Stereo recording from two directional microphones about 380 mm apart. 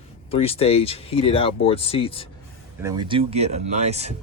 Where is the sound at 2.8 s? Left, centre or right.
Centre.